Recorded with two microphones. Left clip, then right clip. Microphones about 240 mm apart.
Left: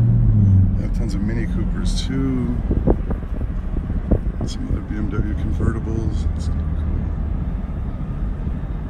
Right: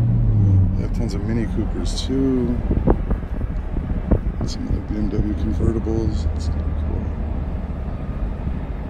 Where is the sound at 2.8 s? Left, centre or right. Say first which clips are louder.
Even; centre.